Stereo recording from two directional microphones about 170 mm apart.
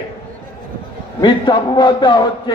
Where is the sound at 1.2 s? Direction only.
25° left (ahead or behind).